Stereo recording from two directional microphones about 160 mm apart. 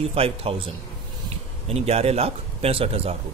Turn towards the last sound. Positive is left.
turn(degrees=-40)  # may be behind; listen again after turning